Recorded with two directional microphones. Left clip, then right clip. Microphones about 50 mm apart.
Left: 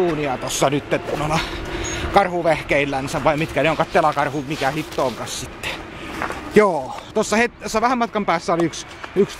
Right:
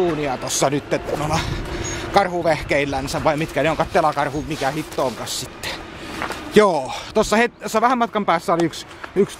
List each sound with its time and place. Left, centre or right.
0.0 s speech: right
0.4 s a man's voice: centre
4.9 s vehicle: right
6.2 s a sound: right
7.2 s speech: right
8.1 s speech: right